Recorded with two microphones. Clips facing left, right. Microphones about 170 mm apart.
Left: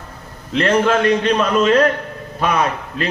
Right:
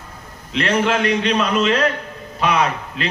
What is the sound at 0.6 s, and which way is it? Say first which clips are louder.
A man's voice: left 3 dB; 45° left (ahead or behind).